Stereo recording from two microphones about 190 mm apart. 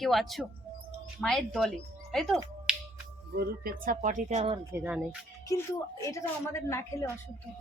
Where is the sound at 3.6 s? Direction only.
45° right (ahead or behind).